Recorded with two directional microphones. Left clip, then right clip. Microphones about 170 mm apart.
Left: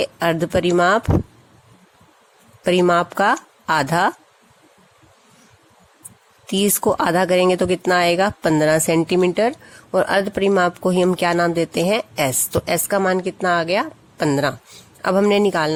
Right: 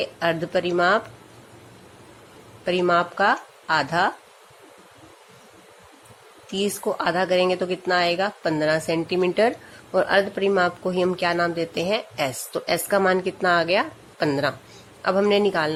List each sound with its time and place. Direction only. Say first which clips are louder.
0.0 s speech: left 4 dB; 50° left (ahead or behind)
2.6 s speech: left 4 dB; 50° left (ahead or behind)
6.5 s speech: left 6 dB; 50° left (ahead or behind)